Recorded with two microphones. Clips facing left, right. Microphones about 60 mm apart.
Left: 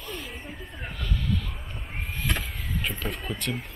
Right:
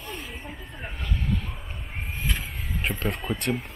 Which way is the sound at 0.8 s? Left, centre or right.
Right.